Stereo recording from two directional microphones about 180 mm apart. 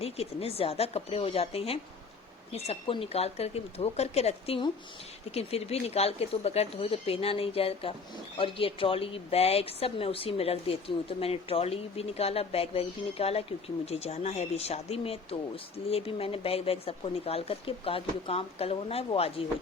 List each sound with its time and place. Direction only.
0.0 s speech: 35° left (ahead or behind)